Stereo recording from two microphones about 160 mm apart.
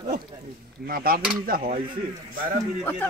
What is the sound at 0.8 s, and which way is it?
Speech, 65° right (ahead or behind).